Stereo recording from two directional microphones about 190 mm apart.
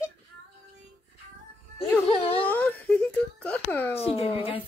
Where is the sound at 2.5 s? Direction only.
10° left (ahead or behind).